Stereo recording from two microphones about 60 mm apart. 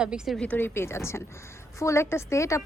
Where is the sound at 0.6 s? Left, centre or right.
Left.